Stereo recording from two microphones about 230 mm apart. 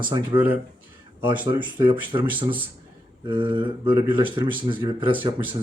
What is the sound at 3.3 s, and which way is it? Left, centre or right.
Speech, right.